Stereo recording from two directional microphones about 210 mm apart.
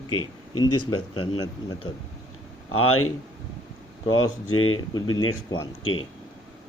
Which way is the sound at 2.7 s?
90° left.